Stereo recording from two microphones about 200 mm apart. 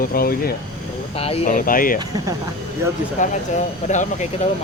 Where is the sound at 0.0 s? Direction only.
45° left (ahead or behind).